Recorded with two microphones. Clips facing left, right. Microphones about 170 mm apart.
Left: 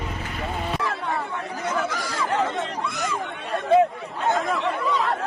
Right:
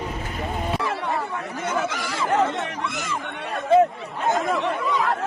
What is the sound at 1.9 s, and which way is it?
Chatter, 25° right (ahead or behind).